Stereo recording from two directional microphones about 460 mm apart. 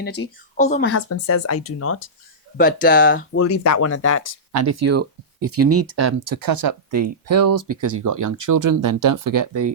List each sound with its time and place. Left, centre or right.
0.2 s speech: left
0.5 s speech: centre
0.9 s speech: left
2.6 s speech: centre
3.4 s speech: left
4.5 s speech: right
6.4 s speech: right